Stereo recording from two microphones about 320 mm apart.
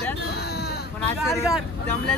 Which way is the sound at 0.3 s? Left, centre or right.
Left.